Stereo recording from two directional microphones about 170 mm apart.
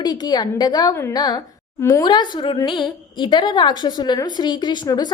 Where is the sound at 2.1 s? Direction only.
25° left (ahead or behind).